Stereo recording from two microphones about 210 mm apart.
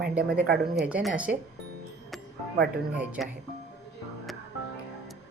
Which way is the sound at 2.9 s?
5° right (ahead or behind).